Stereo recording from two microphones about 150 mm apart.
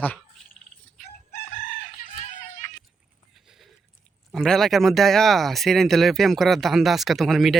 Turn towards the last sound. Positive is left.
turn(degrees=0)  # may be behind; listen again after turning